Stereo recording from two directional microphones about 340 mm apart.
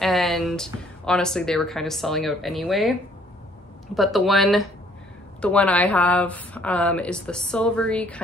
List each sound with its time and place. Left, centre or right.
0.0 s speech: centre